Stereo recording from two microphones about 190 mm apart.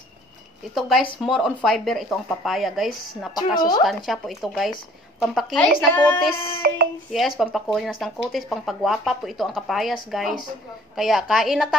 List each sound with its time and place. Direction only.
0.7 s speech: centre (ahead or behind)
3.3 s a woman's voice: 20° left (ahead or behind)
3.8 s speech: centre (ahead or behind)
5.8 s child singing: 5° left (ahead or behind)
7.1 s speech: centre (ahead or behind)
11.0 s speech: centre (ahead or behind)